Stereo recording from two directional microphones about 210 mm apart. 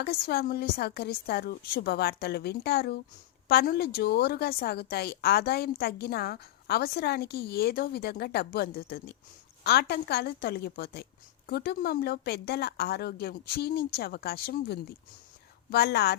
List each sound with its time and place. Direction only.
0.0 s a woman's voice: 50° left (ahead or behind)